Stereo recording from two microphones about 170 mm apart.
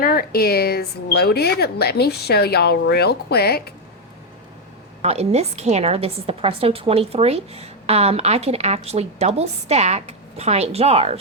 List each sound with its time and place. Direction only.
0.0 s a woman's voice: 60° left (ahead or behind)
5.0 s a woman's voice: 35° right (ahead or behind)